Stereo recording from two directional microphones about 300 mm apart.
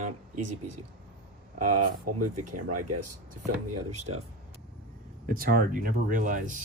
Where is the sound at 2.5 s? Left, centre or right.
Right.